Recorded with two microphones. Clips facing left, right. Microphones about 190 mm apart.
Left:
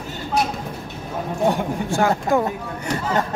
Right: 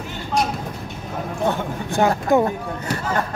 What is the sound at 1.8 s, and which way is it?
Speech, 20° right (ahead or behind).